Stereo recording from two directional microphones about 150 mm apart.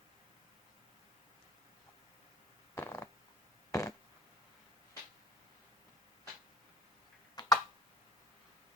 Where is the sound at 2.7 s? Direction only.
15° left (ahead or behind).